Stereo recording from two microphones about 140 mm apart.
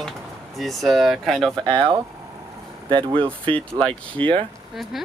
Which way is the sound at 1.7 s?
35° right (ahead or behind).